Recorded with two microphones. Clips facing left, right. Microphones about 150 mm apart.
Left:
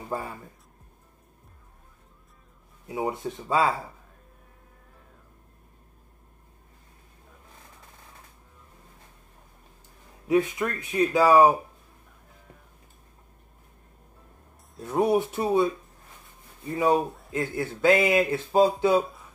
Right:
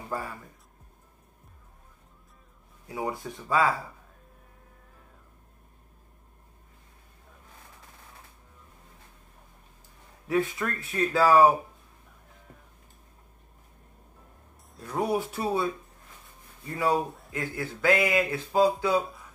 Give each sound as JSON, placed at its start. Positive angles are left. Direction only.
{"t": 0.1, "sound": "speech", "side_deg": 25}
{"t": 2.9, "sound": "speech", "side_deg": 20}
{"t": 10.2, "sound": "speech", "side_deg": 20}
{"t": 14.8, "sound": "speech", "side_deg": 25}